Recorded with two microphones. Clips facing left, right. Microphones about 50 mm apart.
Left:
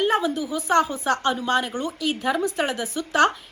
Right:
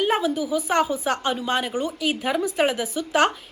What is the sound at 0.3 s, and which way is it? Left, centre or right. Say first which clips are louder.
Speech: left 1 dB; centre.